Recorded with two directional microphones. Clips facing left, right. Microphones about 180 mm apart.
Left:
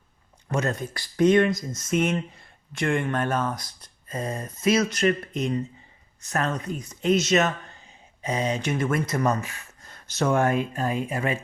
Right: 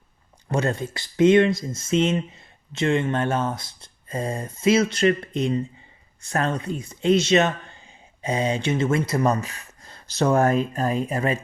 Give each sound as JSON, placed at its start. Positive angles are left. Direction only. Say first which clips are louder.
{"t": 0.4, "sound": "speech", "louder": "right 3 dB", "side_deg": -30}
{"t": 6.2, "sound": "speech", "louder": "right 2 dB", "side_deg": -30}